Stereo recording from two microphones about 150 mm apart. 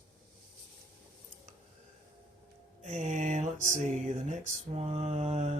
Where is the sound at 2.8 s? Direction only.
50° right (ahead or behind).